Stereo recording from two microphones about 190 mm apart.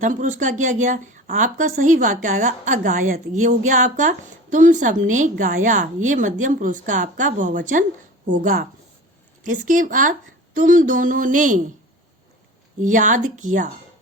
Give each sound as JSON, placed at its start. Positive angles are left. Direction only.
{"t": 0.0, "sound": "a woman's voice", "side_deg": -40}
{"t": 12.8, "sound": "a woman's voice", "side_deg": -40}